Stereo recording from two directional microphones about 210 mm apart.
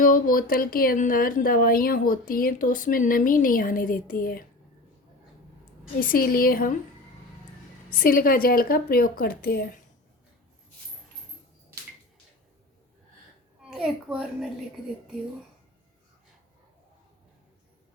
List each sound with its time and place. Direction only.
0.0 s speech: 40° left (ahead or behind)
6.0 s speech: 45° left (ahead or behind)
7.9 s speech: 45° left (ahead or behind)
13.6 s a child's voice: 5° right (ahead or behind)